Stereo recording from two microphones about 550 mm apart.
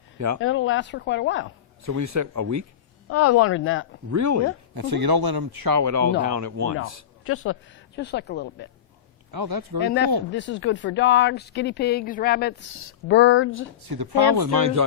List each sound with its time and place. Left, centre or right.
0.3 s speech: left
1.8 s speech: right
3.1 s speech: left
4.1 s speech: right
4.7 s a man's voice: right
6.7 s speech: left
9.3 s a man's voice: right
9.8 s speech: centre
13.9 s a man's voice: right